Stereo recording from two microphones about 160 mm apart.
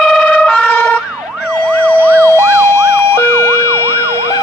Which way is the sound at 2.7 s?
15° left (ahead or behind).